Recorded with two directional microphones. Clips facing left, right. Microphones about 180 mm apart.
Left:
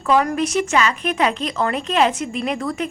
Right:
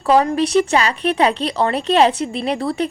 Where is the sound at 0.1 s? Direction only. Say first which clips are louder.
Right 3 dB; 30° right (ahead or behind).